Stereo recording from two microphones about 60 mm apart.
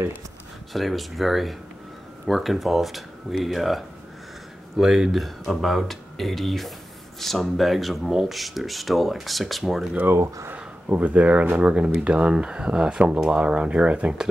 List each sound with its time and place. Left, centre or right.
0.7 s speech: centre
10.5 s speech: right